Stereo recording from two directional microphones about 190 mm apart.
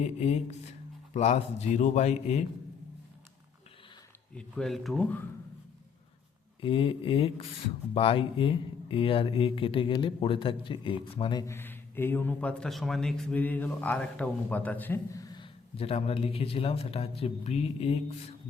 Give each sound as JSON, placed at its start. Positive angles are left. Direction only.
{"t": 0.0, "sound": "a man's voice", "side_deg": 35}
{"t": 4.4, "sound": "speech", "side_deg": 5}
{"t": 6.6, "sound": "speech", "side_deg": 25}